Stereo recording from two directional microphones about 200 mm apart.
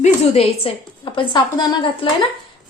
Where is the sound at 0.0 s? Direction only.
30° left (ahead or behind).